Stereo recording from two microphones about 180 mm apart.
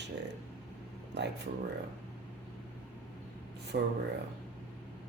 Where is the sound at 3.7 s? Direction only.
65° right (ahead or behind).